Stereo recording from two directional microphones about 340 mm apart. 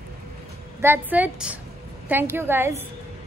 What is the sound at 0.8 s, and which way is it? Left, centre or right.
A woman's voice, centre.